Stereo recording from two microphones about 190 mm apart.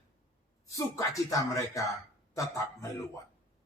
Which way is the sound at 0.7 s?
15° left (ahead or behind).